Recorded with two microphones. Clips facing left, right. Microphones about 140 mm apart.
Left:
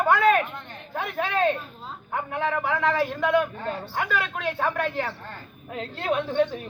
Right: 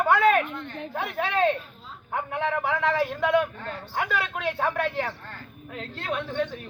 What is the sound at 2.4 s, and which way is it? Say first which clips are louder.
Speech: left 1 dB; 15° right (ahead or behind).